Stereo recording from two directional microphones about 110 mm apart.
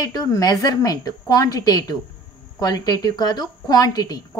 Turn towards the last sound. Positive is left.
turn(degrees=35)  # may be behind; listen again after turning